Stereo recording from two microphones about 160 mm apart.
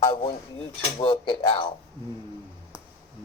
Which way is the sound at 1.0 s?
30° left (ahead or behind).